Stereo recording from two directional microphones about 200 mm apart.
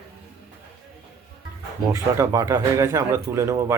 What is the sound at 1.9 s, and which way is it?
Speech, 15° right (ahead or behind).